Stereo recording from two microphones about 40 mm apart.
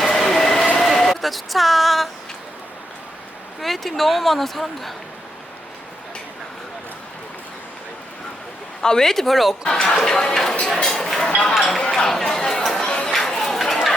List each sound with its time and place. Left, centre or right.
0.0 s train: centre
0.9 s speech: centre
3.6 s speech: centre
8.8 s speech: centre
9.6 s speech: centre
11.5 s speech: centre
11.8 s speech: centre
12.7 s chatter: centre
13.1 s chatter: centre